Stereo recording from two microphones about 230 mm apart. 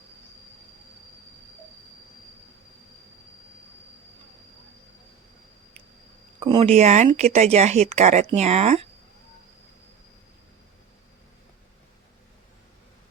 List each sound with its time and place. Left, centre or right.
6.4 s speech: right